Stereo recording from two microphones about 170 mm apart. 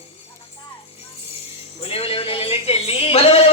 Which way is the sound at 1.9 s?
35° left (ahead or behind).